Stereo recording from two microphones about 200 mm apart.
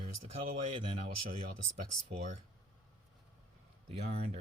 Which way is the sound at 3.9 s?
35° right (ahead or behind).